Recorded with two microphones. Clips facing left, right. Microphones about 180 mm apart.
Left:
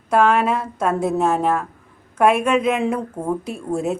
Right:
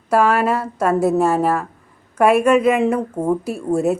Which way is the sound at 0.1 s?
5° right (ahead or behind).